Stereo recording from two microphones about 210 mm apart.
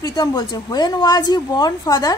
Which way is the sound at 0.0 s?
20° left (ahead or behind).